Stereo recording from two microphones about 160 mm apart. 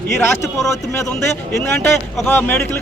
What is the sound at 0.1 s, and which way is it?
Speech, 15° left (ahead or behind).